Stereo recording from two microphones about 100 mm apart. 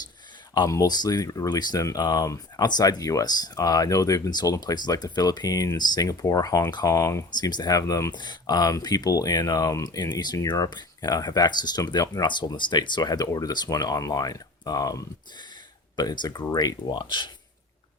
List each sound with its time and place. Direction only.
0.7 s speech: 40° left (ahead or behind)
6.9 s speech: 30° left (ahead or behind)
7.3 s speech: 45° left (ahead or behind)
8.1 s speech: 45° left (ahead or behind)